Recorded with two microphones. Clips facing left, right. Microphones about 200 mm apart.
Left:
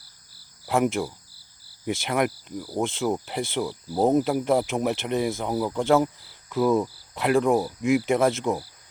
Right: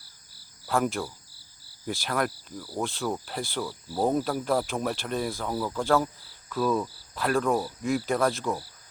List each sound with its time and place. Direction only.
0.6 s cricket: 20° left (ahead or behind)